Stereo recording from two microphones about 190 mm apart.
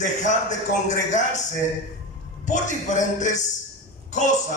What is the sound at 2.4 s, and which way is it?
A man's voice, 40° left (ahead or behind).